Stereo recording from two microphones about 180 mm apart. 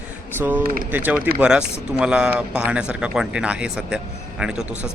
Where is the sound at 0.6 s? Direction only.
50° right (ahead or behind).